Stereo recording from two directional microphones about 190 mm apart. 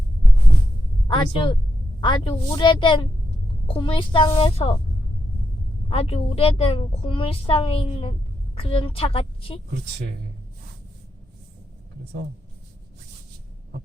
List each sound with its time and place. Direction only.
1.0 s a woman's voice: 25° left (ahead or behind)
5.9 s a woman's voice: 30° left (ahead or behind)